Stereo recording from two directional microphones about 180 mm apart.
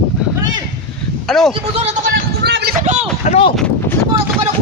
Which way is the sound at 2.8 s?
40° right (ahead or behind).